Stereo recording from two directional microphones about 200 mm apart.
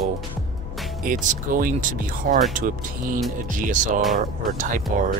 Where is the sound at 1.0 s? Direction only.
45° right (ahead or behind).